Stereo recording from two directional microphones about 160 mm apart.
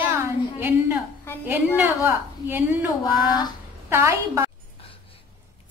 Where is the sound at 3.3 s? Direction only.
25° left (ahead or behind).